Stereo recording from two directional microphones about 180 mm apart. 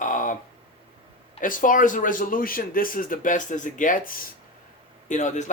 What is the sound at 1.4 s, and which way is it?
Speech, 50° left (ahead or behind).